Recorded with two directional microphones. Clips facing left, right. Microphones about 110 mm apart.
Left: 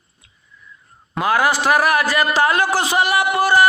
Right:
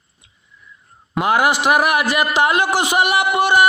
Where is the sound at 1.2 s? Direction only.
20° right (ahead or behind).